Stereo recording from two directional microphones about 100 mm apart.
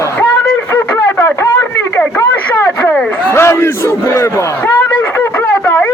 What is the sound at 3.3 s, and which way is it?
Battle cry, 25° left (ahead or behind).